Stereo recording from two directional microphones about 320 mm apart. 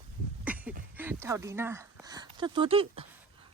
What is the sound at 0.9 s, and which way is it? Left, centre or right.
Speech, centre.